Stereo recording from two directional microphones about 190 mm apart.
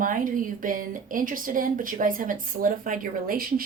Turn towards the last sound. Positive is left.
turn(degrees=-50)  # may be behind; listen again after turning